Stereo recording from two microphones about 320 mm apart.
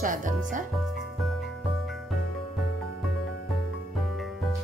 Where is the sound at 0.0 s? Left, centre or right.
Right.